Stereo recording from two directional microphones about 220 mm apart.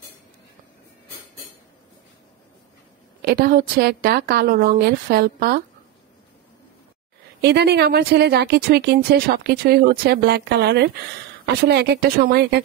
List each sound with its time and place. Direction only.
3.2 s speech: 45° right (ahead or behind)
7.4 s speech: 50° right (ahead or behind)